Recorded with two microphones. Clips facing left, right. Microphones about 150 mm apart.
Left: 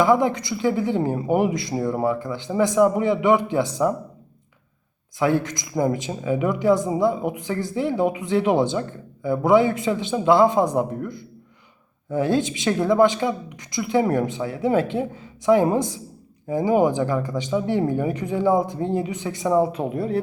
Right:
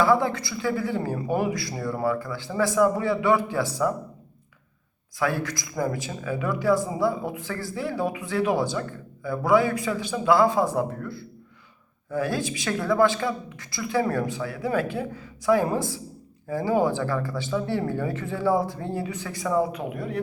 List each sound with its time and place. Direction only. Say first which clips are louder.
0.0 s speech: left 3 dB; 20° left (ahead or behind)
5.2 s speech: left 5 dB; 20° left (ahead or behind)